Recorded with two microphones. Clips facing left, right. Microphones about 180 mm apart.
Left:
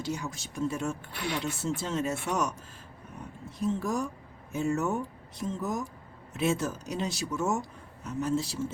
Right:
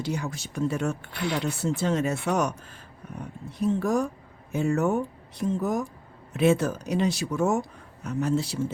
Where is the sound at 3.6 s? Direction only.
65° right (ahead or behind).